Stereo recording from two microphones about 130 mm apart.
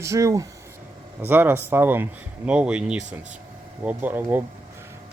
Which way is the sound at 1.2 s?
15° right (ahead or behind).